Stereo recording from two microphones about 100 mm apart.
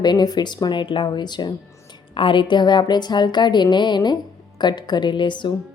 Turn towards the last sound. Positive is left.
turn(degrees=50)  # may be behind; listen again after turning